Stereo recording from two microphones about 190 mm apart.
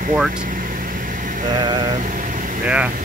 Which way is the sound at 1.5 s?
25° right (ahead or behind).